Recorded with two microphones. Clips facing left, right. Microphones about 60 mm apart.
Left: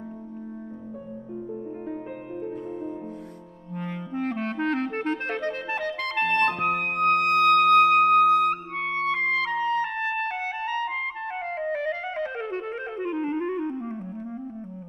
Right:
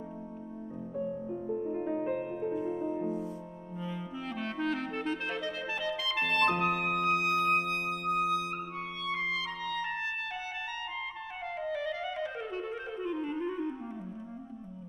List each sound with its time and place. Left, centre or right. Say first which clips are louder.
1.3 s music: left 3 dB; centre
2.5 s music: right 1 dB; left
2.8 s music: right 1 dB; centre
3.7 s clarinet: left 8 dB; left
6.6 s music: left 5 dB; left